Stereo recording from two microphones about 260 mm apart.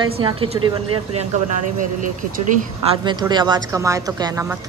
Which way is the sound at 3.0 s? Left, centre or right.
Centre.